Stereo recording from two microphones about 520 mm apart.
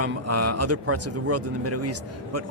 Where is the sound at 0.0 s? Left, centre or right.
Right.